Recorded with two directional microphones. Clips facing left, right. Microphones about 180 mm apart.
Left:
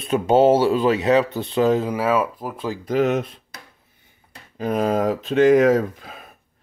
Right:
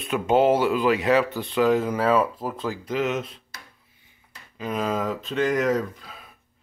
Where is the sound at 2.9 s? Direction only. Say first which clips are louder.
Left 7 dB; 60° left (ahead or behind).